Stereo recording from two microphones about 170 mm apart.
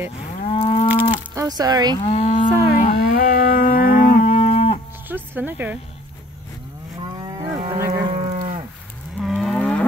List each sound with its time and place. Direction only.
0.5 s moo: 35° left (ahead or behind)
1.1 s a sound: 20° right (ahead or behind)
2.0 s livestock: 40° left (ahead or behind)
5.0 s music: 10° right (ahead or behind)
7.0 s livestock: 25° right (ahead or behind)
8.1 s moo: 35° right (ahead or behind)
9.2 s moo: centre (ahead or behind)